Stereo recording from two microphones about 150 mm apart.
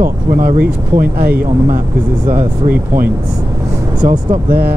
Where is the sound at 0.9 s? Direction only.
15° right (ahead or behind).